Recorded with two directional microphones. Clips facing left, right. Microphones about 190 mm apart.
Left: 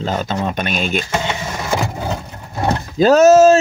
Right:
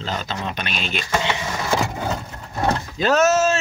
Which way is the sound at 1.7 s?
5° left (ahead or behind).